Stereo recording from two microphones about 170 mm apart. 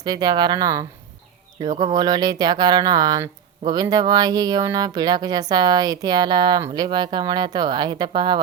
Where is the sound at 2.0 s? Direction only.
25° right (ahead or behind).